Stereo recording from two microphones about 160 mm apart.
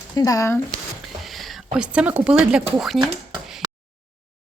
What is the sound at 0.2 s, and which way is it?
Speech, 20° left (ahead or behind).